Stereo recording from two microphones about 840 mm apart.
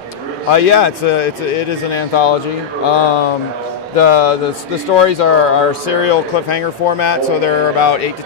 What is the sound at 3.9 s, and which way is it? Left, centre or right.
Speech, left.